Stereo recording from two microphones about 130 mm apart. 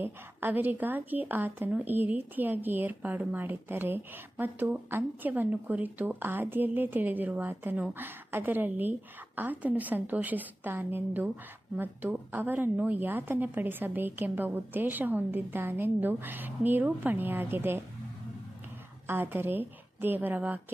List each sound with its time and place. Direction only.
0.0 s a woman's voice: 15° right (ahead or behind)
19.0 s a woman's voice: 15° right (ahead or behind)